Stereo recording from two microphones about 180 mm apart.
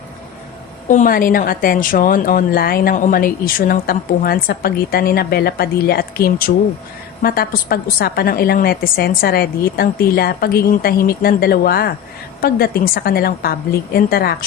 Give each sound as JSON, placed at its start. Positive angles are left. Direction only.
{"t": 0.9, "sound": "a woman's voice", "side_deg": 45}